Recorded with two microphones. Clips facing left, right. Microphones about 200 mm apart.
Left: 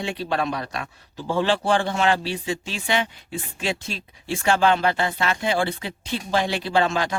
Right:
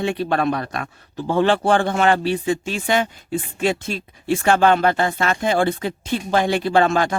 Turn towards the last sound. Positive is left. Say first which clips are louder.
# right 5 dB
turn(degrees=-50)  # may be behind; listen again after turning